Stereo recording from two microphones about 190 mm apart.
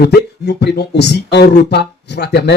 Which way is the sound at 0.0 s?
60° left (ahead or behind).